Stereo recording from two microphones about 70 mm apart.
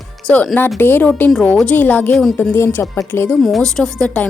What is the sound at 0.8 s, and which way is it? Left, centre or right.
Speech, left.